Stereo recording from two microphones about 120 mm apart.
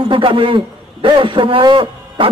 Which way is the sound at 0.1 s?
45° right (ahead or behind).